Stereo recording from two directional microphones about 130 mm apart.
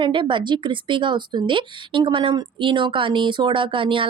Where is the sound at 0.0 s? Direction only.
40° right (ahead or behind).